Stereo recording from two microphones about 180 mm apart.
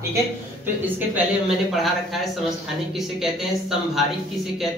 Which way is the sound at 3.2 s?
Centre (ahead or behind).